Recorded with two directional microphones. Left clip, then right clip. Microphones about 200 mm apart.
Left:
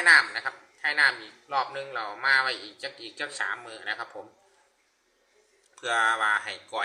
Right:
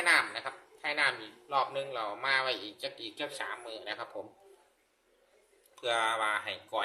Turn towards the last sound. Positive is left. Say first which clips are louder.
# left 5 dB
turn(degrees=-20)  # may be behind; listen again after turning